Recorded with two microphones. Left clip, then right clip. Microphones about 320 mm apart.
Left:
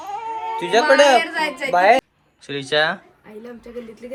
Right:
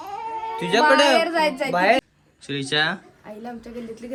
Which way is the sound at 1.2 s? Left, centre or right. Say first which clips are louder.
Right 1 dB; right.